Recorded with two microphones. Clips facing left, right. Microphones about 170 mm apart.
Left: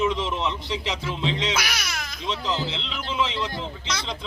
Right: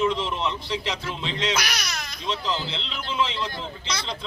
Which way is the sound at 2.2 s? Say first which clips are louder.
Left 1 dB; 20° left (ahead or behind).